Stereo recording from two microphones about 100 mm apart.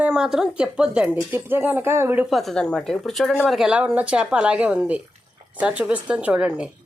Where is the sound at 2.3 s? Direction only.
5° left (ahead or behind).